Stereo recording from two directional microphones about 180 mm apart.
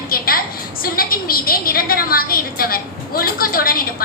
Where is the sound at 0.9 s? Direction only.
55° left (ahead or behind).